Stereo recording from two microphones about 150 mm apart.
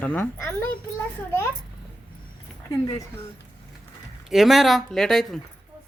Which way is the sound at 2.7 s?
20° left (ahead or behind).